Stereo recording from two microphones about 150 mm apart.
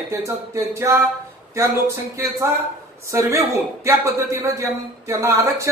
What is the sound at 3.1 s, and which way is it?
A man's voice, 20° right (ahead or behind).